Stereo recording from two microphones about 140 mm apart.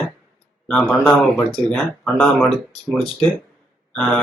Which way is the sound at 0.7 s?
10° left (ahead or behind).